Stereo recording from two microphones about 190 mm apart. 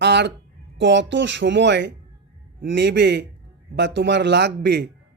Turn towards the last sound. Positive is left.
turn(degrees=-60)  # may be behind; listen again after turning